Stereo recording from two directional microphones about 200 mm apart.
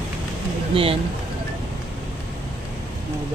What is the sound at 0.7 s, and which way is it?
Speech, 25° right (ahead or behind).